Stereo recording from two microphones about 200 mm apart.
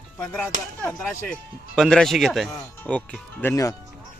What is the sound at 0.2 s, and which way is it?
Speech, 10° left (ahead or behind).